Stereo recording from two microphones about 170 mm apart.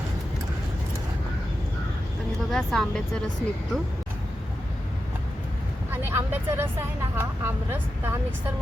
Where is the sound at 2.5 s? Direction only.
Centre (ahead or behind).